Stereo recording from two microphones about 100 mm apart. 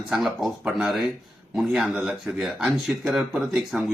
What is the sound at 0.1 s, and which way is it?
Speech, 5° right (ahead or behind).